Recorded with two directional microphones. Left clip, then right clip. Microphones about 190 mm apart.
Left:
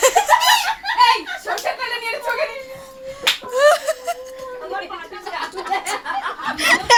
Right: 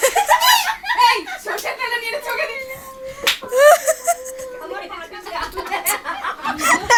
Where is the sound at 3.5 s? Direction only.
5° right (ahead or behind).